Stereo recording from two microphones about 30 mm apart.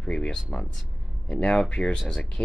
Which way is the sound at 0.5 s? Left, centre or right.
Left.